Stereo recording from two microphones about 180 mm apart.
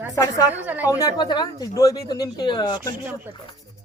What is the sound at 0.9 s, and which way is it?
Speech, 20° left (ahead or behind).